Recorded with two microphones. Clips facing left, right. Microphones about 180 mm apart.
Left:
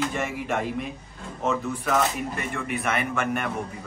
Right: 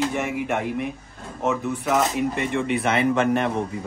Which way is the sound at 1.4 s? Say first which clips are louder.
Right 2 dB; 15° right (ahead or behind).